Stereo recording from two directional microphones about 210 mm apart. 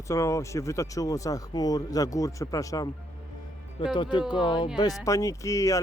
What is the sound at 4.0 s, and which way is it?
Speech, 20° left (ahead or behind).